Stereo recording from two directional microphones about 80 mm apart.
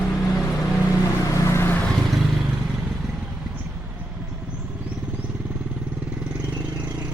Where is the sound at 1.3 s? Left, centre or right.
Left.